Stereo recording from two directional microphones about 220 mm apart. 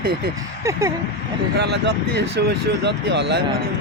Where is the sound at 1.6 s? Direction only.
50° right (ahead or behind).